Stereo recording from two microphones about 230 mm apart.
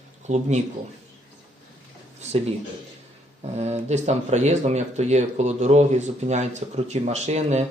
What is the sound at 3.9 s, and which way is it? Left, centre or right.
Speech, right.